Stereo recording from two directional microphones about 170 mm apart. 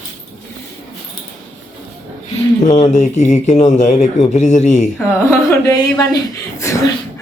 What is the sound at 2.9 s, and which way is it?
Speech, 45° left (ahead or behind).